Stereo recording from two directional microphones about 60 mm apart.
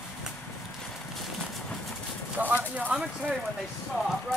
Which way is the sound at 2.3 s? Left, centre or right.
Right.